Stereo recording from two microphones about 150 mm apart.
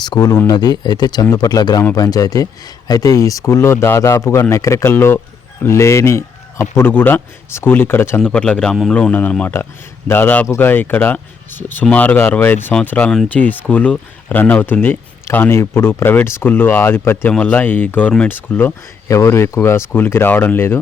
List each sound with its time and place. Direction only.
0.0 s speech: 25° left (ahead or behind)